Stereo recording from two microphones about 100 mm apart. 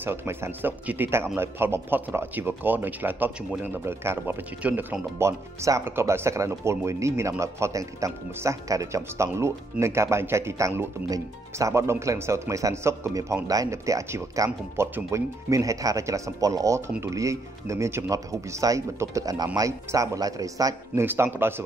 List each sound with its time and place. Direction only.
0.0 s speech: 20° right (ahead or behind)
11.1 s speech: 35° right (ahead or behind)
19.9 s speech: 25° right (ahead or behind)
21.0 s speech: 20° right (ahead or behind)